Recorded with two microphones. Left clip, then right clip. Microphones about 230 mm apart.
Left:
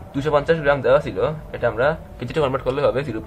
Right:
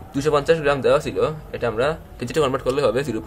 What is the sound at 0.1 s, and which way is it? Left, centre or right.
Speech, right.